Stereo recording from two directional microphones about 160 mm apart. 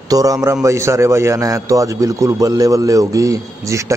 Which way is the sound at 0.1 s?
20° right (ahead or behind).